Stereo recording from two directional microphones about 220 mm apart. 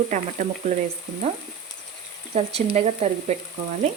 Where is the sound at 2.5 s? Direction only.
30° right (ahead or behind).